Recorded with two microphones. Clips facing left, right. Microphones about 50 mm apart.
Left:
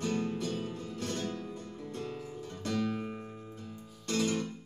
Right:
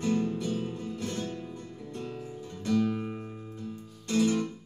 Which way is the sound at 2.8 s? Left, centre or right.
Centre.